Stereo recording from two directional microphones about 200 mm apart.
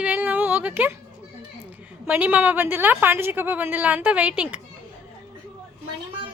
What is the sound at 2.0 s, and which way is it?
A woman's voice, 10° right (ahead or behind).